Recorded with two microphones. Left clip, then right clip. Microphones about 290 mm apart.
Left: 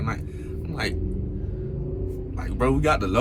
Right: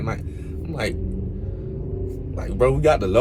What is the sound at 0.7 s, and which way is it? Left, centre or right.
Speech, centre.